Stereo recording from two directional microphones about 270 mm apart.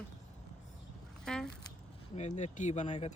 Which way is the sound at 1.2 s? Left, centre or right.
Centre.